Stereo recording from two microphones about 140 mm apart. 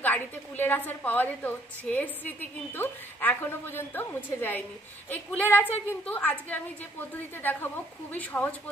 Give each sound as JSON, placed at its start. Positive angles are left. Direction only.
{"t": 0.0, "sound": "a woman's voice", "side_deg": 15}
{"t": 7.4, "sound": "a woman's voice", "side_deg": 15}